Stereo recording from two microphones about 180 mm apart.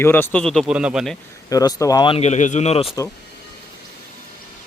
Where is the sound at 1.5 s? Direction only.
20° left (ahead or behind); by 2.9 s 35° left (ahead or behind).